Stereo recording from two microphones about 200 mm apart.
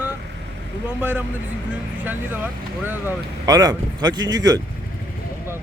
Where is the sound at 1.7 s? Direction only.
10° right (ahead or behind).